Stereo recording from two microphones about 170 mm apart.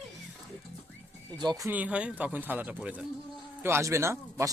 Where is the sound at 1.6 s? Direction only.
10° right (ahead or behind).